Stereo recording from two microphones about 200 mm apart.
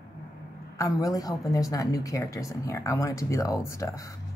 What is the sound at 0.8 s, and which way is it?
A woman's voice, 15° left (ahead or behind).